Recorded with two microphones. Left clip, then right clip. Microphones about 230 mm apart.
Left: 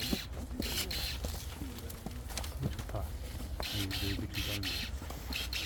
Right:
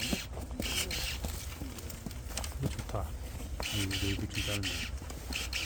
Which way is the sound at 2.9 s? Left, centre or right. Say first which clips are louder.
Right 5 dB; right.